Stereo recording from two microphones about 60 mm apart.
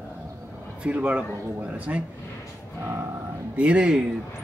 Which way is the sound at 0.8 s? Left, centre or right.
Centre.